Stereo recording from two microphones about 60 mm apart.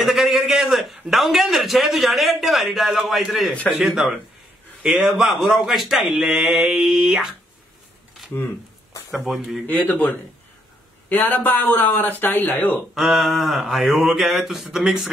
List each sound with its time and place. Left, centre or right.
0.0 s a sound: centre
1.1 s a man's voice: centre
9.1 s speech: centre
9.7 s speech: left
12.9 s speech: centre